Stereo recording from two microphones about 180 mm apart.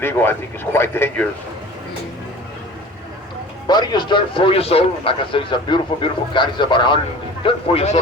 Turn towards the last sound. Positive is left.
turn(degrees=35)  # may be behind; listen again after turning